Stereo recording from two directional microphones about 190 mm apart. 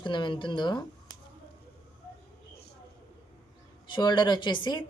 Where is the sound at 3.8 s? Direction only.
25° left (ahead or behind).